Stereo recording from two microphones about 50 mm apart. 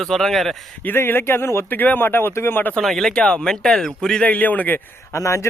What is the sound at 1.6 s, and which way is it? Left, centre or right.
Speech, left.